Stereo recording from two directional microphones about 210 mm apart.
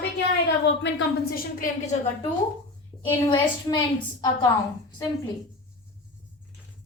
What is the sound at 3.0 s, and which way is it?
A woman's voice, 20° left (ahead or behind).